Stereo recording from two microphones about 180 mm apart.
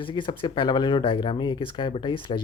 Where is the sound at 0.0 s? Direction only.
25° left (ahead or behind).